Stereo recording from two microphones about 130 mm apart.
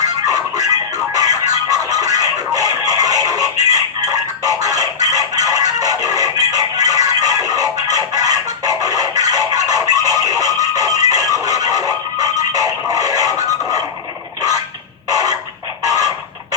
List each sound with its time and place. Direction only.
0.0 s music: 30° right (ahead or behind)
15.1 s a sound: 30° right (ahead or behind)
15.8 s music: 25° right (ahead or behind)